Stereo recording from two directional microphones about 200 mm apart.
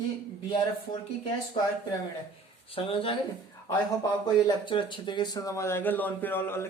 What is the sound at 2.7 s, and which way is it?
Speech, 25° left (ahead or behind).